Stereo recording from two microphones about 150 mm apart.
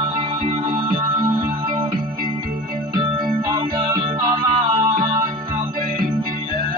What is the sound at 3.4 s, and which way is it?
Music, 25° right (ahead or behind).